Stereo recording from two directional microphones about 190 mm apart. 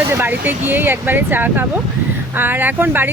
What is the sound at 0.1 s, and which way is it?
Speech, 10° right (ahead or behind).